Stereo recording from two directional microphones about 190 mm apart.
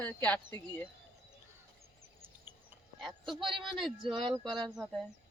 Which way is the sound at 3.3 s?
25° right (ahead or behind).